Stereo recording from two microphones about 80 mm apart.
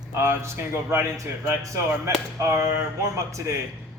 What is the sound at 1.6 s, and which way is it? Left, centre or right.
Speech, right.